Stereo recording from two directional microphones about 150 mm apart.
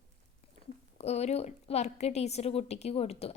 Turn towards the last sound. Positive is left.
turn(degrees=45)  # may be behind; listen again after turning